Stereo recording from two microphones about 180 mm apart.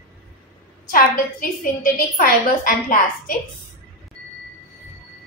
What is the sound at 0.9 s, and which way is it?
A woman's voice, 50° left (ahead or behind).